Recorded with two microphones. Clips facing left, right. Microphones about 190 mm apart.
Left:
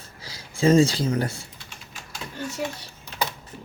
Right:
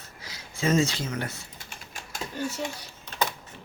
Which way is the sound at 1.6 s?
45° right (ahead or behind).